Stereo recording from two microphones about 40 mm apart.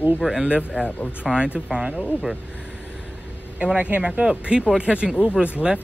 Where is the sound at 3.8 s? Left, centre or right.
Right.